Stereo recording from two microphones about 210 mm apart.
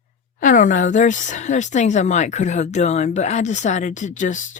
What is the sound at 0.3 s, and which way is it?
Speech, 40° left (ahead or behind).